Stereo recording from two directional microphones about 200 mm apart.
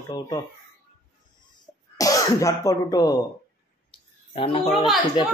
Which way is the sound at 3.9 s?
25° left (ahead or behind).